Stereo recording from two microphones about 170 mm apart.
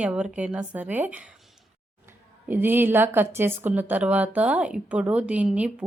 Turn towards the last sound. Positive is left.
turn(degrees=-5)  # may be behind; listen again after turning